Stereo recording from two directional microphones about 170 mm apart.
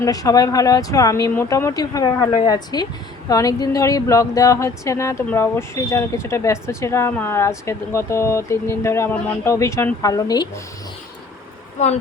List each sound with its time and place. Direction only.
0.0 s speech: 20° left (ahead or behind)